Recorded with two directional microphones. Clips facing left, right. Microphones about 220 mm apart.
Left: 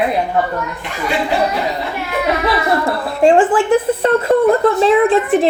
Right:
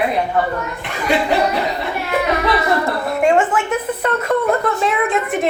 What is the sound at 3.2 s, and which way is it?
A woman's voice, 30° left (ahead or behind).